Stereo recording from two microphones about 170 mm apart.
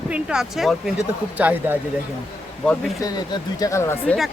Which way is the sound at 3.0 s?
25° left (ahead or behind).